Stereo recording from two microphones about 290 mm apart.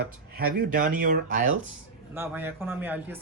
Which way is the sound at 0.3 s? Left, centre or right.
Right.